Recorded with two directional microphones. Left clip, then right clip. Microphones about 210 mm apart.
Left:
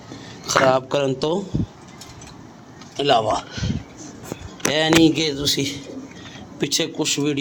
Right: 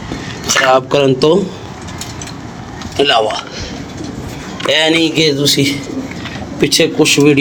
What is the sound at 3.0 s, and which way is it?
Speech, 10° left (ahead or behind).